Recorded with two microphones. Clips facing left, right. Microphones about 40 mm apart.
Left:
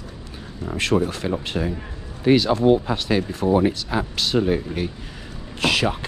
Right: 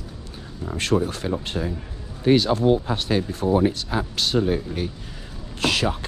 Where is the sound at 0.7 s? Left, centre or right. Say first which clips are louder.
Left 1 dB; left.